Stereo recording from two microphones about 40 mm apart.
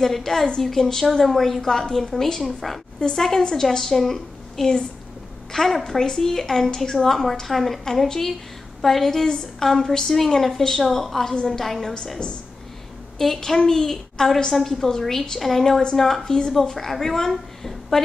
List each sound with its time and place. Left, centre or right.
0.0 s a woman's voice: centre
2.4 s a woman's voice: centre
3.0 s a woman's voice: centre
13.2 s a woman's voice: centre